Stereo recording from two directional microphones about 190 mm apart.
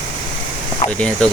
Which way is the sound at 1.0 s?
5° left (ahead or behind).